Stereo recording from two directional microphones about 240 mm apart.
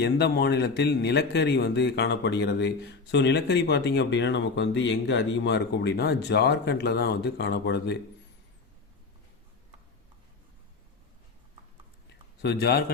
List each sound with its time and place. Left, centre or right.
0.0 s speech: left
12.4 s a man's voice: left